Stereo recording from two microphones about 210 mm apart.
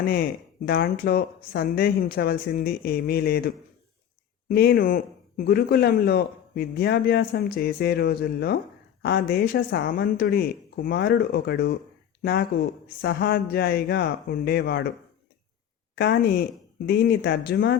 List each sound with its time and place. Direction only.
0.0 s a man's voice: 45° left (ahead or behind)
16.0 s a man's voice: 50° left (ahead or behind)